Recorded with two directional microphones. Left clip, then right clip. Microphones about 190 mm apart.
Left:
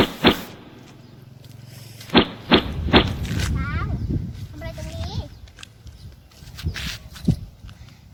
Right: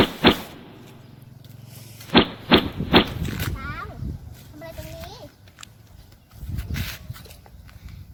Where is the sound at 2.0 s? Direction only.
Centre (ahead or behind).